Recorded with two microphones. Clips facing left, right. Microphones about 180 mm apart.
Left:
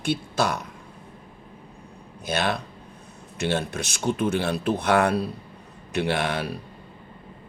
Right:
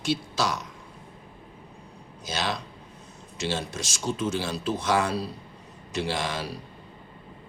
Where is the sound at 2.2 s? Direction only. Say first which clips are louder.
Left 5 dB; 60° left (ahead or behind).